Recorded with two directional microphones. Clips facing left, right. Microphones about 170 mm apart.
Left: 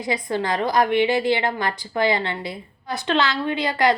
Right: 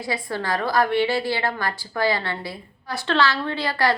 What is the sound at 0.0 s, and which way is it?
A woman's voice, 20° left (ahead or behind).